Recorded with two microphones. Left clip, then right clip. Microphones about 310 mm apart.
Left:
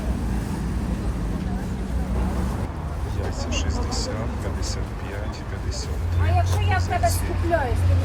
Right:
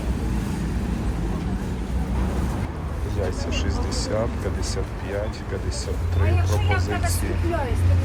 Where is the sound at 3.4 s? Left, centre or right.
Centre.